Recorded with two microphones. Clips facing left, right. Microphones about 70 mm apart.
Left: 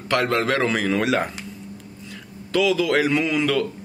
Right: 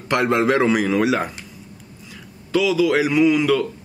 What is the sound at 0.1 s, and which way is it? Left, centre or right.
A man's voice, right.